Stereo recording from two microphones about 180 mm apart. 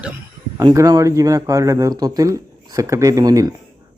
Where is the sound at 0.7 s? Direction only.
15° right (ahead or behind).